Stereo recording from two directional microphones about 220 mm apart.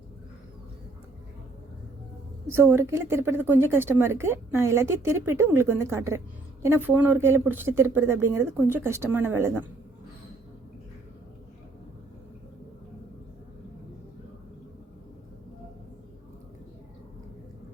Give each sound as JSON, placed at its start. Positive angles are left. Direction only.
{"t": 2.5, "sound": "a woman's voice", "side_deg": -10}